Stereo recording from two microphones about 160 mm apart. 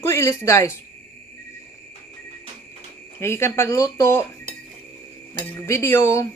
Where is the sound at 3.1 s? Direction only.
15° left (ahead or behind).